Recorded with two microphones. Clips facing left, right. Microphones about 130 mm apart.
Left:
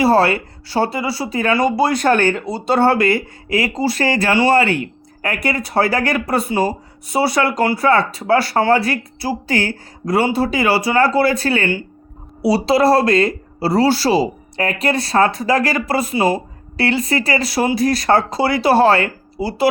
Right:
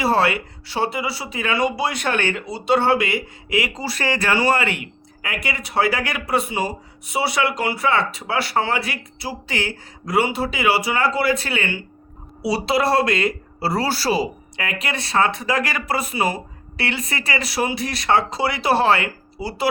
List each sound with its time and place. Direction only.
0.0 s speech: 35° left (ahead or behind)